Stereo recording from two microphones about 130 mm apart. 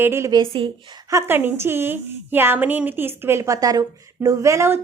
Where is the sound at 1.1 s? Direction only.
15° right (ahead or behind).